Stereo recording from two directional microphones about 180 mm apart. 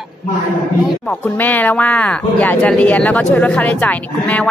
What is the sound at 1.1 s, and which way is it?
Speech, 10° left (ahead or behind).